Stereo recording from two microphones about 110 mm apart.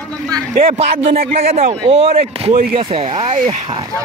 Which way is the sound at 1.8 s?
65° right (ahead or behind).